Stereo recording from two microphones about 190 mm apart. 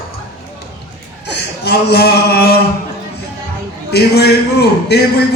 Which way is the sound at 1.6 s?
60° left (ahead or behind).